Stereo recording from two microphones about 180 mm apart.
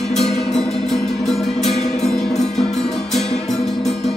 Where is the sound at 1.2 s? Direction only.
Centre (ahead or behind).